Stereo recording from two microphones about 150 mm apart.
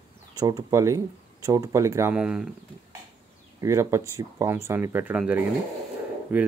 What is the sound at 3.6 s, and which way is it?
Speech, 20° right (ahead or behind).